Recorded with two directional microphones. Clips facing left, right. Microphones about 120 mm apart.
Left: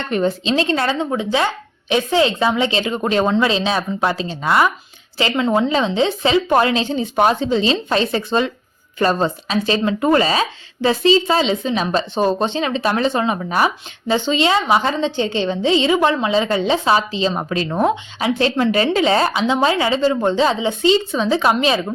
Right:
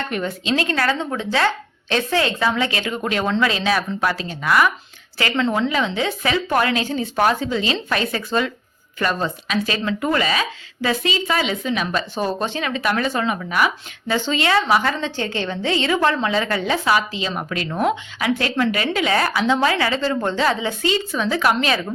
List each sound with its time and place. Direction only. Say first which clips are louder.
0.1 s speech: left 8 dB; 30° left (ahead or behind)